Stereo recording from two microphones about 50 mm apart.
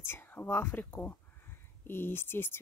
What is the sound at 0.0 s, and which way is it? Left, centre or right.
Speech, left.